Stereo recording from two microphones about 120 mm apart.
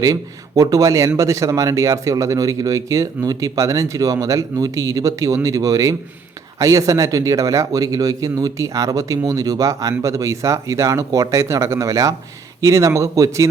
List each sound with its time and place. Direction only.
0.0 s speech: 30° right (ahead or behind)